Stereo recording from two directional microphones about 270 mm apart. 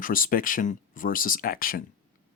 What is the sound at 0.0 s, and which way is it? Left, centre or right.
Speech, left.